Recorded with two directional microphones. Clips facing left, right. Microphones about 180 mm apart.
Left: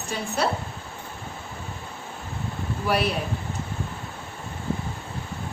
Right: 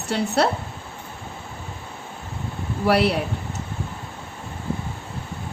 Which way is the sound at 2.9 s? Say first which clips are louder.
Right 5 dB; 70° right (ahead or behind).